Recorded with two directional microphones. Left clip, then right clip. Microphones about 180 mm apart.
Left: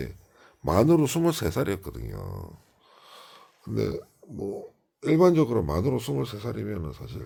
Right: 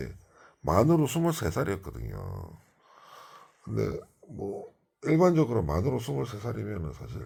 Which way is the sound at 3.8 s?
55° left (ahead or behind).